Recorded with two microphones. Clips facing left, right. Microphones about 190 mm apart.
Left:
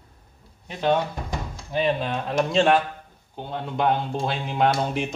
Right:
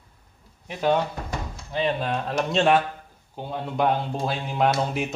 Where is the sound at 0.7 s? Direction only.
5° right (ahead or behind).